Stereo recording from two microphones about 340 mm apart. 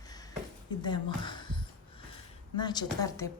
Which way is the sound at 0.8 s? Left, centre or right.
Centre.